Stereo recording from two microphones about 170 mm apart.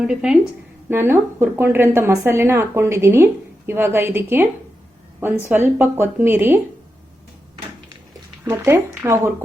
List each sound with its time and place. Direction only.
0.0 s a woman's voice: 5° right (ahead or behind)
8.4 s a woman's voice: 15° right (ahead or behind)